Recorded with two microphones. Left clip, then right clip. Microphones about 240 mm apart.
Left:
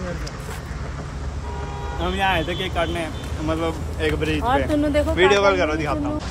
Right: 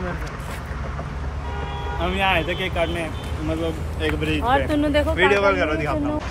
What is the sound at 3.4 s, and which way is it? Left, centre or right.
Speech, left.